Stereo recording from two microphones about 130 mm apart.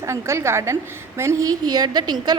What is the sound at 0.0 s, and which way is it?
A woman's voice, 20° right (ahead or behind).